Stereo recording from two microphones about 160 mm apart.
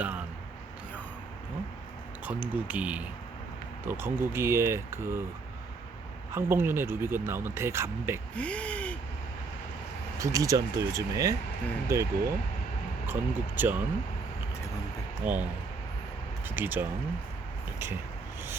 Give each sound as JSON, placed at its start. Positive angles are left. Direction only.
{"t": 2.2, "sound": "speech", "side_deg": -10}
{"t": 6.3, "sound": "speech", "side_deg": -15}
{"t": 8.4, "sound": "speech", "side_deg": 10}
{"t": 10.2, "sound": "speech", "side_deg": -20}
{"t": 15.2, "sound": "speech", "side_deg": -10}
{"t": 16.6, "sound": "speech", "side_deg": -10}